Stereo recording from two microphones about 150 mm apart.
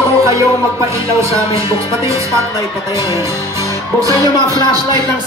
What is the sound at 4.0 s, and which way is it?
Music, 20° right (ahead or behind).